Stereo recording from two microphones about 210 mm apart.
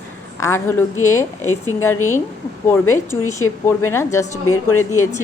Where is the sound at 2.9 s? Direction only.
10° left (ahead or behind).